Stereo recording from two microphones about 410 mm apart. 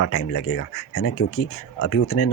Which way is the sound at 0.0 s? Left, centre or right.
Left.